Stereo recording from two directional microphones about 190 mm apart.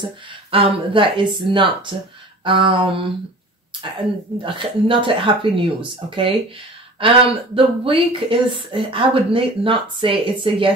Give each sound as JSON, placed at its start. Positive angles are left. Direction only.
{"t": 0.3, "sound": "speech", "side_deg": -25}
{"t": 4.4, "sound": "speech", "side_deg": -25}
{"t": 7.3, "sound": "speech", "side_deg": -30}